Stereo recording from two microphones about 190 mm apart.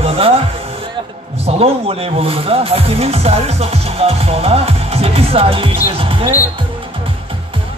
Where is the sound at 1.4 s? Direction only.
30° right (ahead or behind).